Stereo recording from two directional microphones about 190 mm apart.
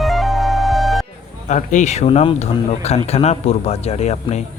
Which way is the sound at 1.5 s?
40° left (ahead or behind).